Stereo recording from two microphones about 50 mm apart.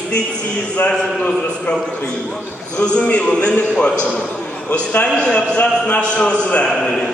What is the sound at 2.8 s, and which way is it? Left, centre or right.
Speech, left.